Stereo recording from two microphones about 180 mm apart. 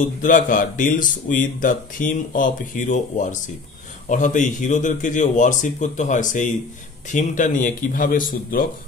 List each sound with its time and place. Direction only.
0.0 s speech: 45° left (ahead or behind)